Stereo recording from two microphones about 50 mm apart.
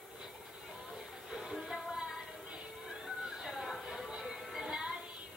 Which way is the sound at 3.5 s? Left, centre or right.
Centre.